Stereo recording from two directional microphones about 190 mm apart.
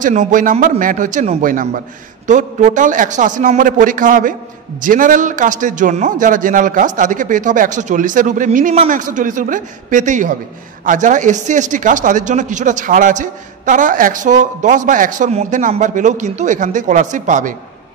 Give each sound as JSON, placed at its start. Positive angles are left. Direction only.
{"t": 0.0, "sound": "a man's voice", "side_deg": -40}